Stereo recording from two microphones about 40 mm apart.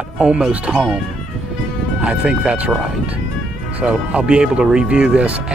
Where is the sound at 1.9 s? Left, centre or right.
Right.